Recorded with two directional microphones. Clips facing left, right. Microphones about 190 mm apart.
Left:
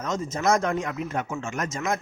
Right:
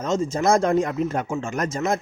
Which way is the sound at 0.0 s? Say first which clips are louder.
Right 4 dB; 30° right (ahead or behind).